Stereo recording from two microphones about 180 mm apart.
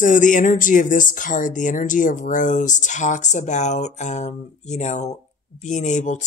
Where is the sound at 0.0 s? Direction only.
45° left (ahead or behind).